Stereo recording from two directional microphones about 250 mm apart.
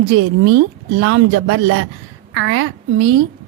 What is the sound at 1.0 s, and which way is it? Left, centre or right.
A woman's voice, right.